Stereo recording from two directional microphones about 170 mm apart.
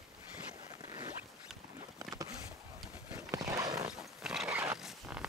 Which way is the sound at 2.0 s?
20° right (ahead or behind).